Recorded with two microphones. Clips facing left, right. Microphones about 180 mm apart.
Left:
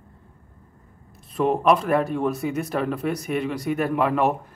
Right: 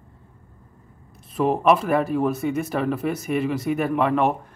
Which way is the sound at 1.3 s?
Centre (ahead or behind).